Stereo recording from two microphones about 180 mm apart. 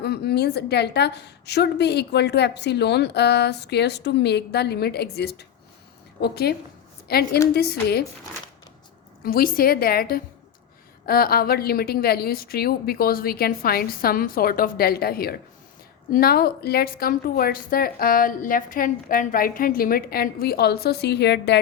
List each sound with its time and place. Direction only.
0.0 s a woman's voice: 65° left (ahead or behind)
9.2 s a woman's voice: 55° left (ahead or behind); by 21.6 s 70° left (ahead or behind)